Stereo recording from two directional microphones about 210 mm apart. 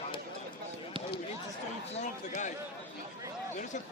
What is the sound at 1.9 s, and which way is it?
Chatter, 35° left (ahead or behind).